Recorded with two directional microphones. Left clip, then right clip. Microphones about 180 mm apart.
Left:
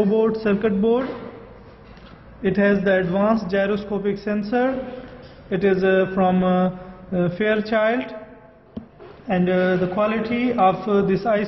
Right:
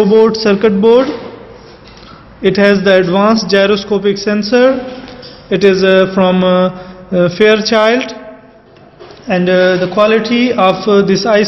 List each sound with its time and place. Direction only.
0.2 s mantra: 35° right (ahead or behind)
2.4 s a man's voice: 45° right (ahead or behind)
5.5 s mantra: 40° right (ahead or behind)
9.3 s mantra: 30° right (ahead or behind)